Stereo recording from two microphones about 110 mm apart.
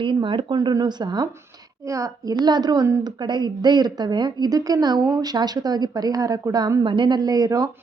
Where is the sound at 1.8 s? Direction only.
30° right (ahead or behind).